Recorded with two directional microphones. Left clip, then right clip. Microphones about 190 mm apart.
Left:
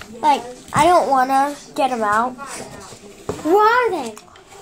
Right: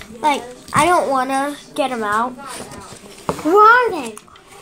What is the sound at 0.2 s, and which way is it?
A child's voice, 10° right (ahead or behind).